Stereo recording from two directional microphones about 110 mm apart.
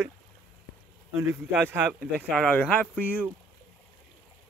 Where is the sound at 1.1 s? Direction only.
20° right (ahead or behind).